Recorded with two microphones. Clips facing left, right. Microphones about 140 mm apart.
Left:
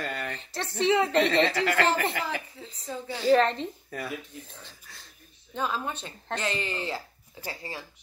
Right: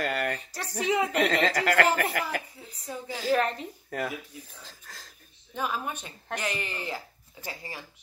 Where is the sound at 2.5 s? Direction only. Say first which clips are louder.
Left 2 dB; 10° right (ahead or behind).